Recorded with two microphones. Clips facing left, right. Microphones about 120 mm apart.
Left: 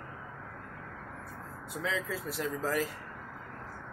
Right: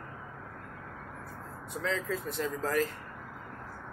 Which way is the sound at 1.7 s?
5° left (ahead or behind).